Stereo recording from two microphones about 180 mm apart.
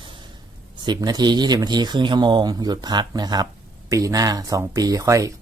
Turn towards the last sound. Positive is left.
turn(degrees=-20)  # may be behind; listen again after turning